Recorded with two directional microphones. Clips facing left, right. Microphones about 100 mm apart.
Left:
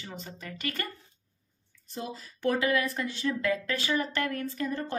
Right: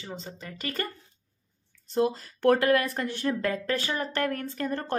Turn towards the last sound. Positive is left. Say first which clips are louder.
# right 2 dB
turn(degrees=-60)  # may be behind; listen again after turning